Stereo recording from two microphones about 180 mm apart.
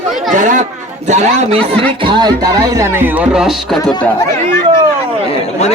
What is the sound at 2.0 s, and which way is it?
Music, 25° right (ahead or behind).